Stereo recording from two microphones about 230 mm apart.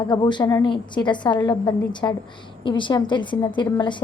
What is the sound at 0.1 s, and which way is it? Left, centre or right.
A woman's voice, centre.